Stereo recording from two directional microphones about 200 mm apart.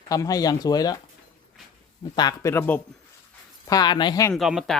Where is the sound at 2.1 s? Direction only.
20° left (ahead or behind).